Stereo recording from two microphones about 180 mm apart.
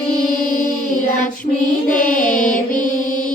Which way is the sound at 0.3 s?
45° left (ahead or behind).